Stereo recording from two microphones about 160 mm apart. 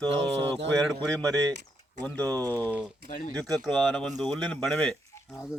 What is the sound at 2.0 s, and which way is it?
Speech, 10° left (ahead or behind).